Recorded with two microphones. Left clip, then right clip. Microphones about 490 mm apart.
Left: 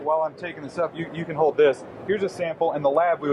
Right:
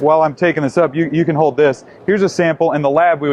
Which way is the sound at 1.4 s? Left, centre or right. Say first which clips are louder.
Right 4 dB; right.